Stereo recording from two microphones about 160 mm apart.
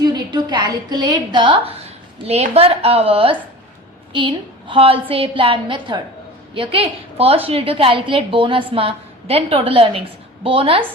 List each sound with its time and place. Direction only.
0.0 s a woman's voice: 30° right (ahead or behind)